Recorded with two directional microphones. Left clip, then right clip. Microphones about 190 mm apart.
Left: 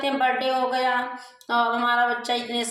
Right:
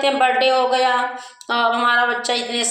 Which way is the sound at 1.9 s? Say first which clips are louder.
Right 5 dB; 25° left (ahead or behind).